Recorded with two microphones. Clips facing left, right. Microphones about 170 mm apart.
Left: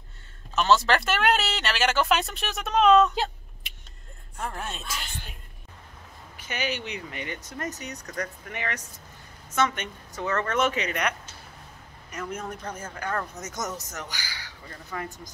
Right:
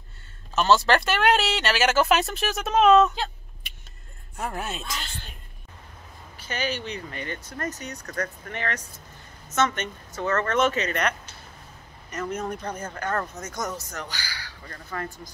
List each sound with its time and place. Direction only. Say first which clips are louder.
0.6 s speech: right 2 dB; centre (ahead or behind)
4.4 s speech: right 3 dB; 10° right (ahead or behind)
4.8 s speech: right 1 dB; 10° left (ahead or behind)
6.4 s speech: right 1 dB; 15° left (ahead or behind)
13.4 s speech: right 2 dB; 20° left (ahead or behind)
14.7 s speech: right 1 dB; 10° left (ahead or behind)